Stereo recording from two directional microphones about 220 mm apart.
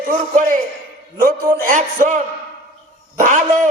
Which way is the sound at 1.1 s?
40° right (ahead or behind).